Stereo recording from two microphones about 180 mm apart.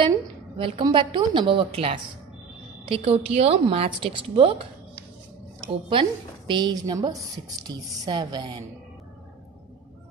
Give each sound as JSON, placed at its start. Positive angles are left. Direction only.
{"t": 0.6, "sound": "a woman's voice", "side_deg": -30}
{"t": 5.7, "sound": "a woman's voice", "side_deg": -30}